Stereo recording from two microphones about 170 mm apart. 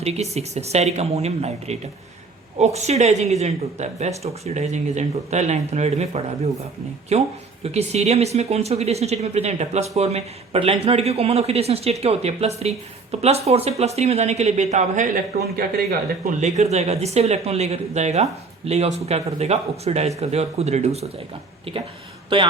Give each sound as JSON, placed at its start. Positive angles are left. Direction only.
{"t": 0.0, "sound": "speech", "side_deg": -40}
{"t": 16.4, "sound": "speech", "side_deg": -40}